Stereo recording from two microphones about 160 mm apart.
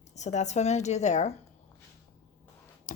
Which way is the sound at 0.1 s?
45° left (ahead or behind).